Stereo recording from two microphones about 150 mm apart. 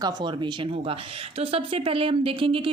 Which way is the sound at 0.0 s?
30° right (ahead or behind).